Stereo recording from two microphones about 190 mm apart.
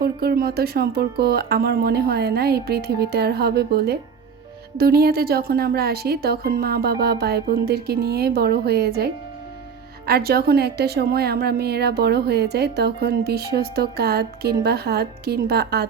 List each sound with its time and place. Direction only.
0.0 s a woman's voice: 55° right (ahead or behind)